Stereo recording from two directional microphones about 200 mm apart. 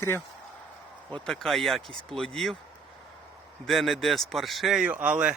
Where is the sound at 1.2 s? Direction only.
5° left (ahead or behind).